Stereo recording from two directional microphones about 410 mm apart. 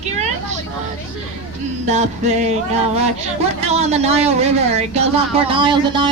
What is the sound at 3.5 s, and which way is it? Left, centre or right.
Speech, centre.